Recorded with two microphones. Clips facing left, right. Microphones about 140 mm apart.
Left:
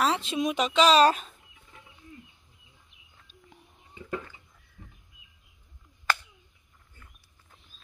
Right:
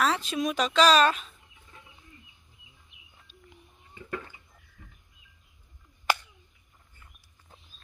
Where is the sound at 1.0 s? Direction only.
45° left (ahead or behind).